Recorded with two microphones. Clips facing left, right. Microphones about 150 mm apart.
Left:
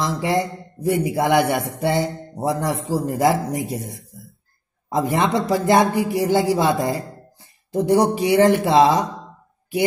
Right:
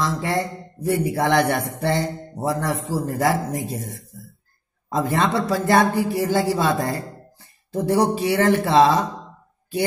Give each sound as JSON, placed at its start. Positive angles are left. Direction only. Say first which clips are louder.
{"t": 0.0, "sound": "a man's voice", "louder": "left 2 dB", "side_deg": 15}